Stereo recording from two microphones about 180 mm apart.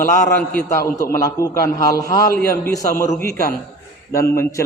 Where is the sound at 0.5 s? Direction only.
15° left (ahead or behind).